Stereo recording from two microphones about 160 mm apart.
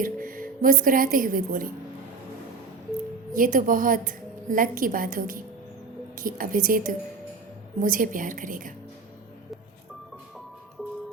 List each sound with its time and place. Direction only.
0.0 s a woman's voice: 60° right (ahead or behind)
3.3 s a woman's voice: 60° right (ahead or behind)